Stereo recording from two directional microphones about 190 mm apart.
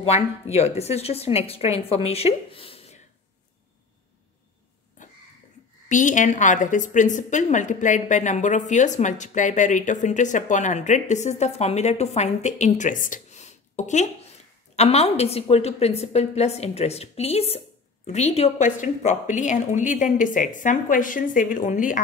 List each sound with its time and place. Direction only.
0.0 s a woman's voice: 35° left (ahead or behind)
5.9 s a woman's voice: 40° left (ahead or behind)